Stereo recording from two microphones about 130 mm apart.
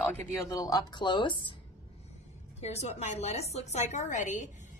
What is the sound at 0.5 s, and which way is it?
Speech, 30° left (ahead or behind).